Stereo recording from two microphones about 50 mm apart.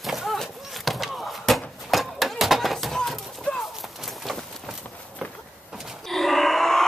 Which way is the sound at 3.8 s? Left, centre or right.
Centre.